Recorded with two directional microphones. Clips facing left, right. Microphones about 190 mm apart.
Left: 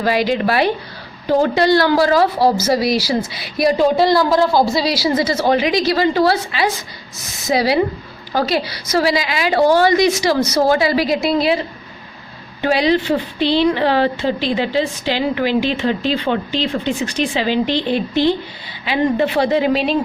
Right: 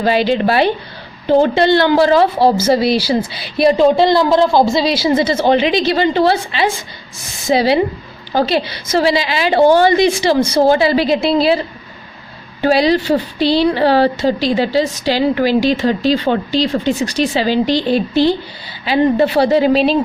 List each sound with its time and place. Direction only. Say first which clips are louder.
0.0 s a woman's voice: right 3 dB; 30° right (ahead or behind)
12.6 s speech: right 3 dB; 35° right (ahead or behind)